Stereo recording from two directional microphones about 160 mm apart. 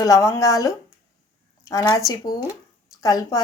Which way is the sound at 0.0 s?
20° left (ahead or behind).